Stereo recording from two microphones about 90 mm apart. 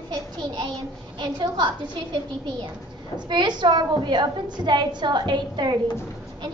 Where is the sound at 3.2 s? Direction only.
55° right (ahead or behind).